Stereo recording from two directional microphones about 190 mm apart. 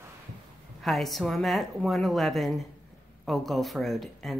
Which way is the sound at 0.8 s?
Centre (ahead or behind).